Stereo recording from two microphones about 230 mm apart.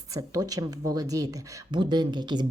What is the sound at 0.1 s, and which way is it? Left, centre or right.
A woman's voice, centre.